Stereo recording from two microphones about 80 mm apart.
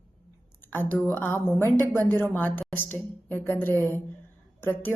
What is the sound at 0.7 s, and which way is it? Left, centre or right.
A woman's voice, left.